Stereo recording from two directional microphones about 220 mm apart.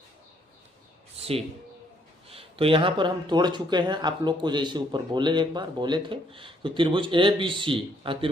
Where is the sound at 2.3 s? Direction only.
25° right (ahead or behind).